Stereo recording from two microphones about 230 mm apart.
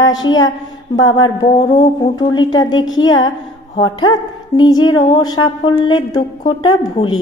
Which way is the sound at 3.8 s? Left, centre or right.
Centre.